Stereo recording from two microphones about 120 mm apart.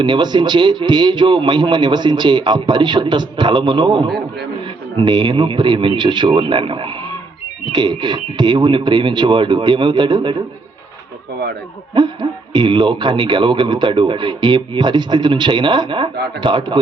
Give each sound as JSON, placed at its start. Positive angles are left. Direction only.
{"t": 0.0, "sound": "a man's voice", "side_deg": -40}
{"t": 12.0, "sound": "a man's voice", "side_deg": -40}